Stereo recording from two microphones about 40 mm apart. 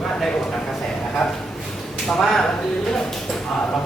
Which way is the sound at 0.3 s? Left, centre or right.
Centre.